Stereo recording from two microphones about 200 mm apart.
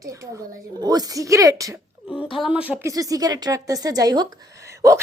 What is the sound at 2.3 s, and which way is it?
Speech, 5° right (ahead or behind).